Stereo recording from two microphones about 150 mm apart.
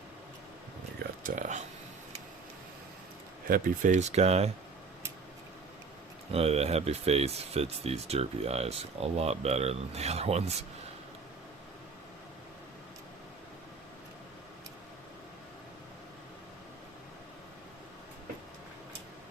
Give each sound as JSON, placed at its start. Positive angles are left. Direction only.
{"t": 1.2, "sound": "speech", "side_deg": -55}
{"t": 3.4, "sound": "speech", "side_deg": -65}
{"t": 6.3, "sound": "speech", "side_deg": -45}